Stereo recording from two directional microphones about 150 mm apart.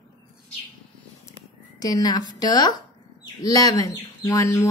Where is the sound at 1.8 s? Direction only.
25° left (ahead or behind).